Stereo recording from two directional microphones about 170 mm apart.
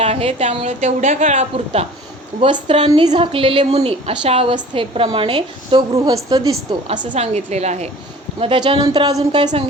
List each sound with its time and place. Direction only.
0.0 s a woman's voice: 35° right (ahead or behind)
6.8 s a woman's voice: 50° right (ahead or behind); by 9.5 s 25° right (ahead or behind)